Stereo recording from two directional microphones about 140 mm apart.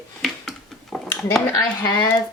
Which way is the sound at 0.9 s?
5° left (ahead or behind).